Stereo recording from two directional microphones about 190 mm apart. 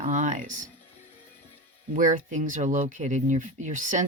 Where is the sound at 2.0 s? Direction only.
40° right (ahead or behind).